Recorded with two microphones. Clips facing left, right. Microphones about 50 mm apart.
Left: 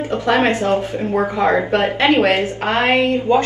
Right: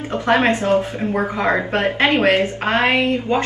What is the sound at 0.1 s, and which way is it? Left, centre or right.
Mantra, right.